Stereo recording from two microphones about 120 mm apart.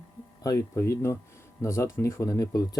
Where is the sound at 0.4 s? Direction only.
25° left (ahead or behind).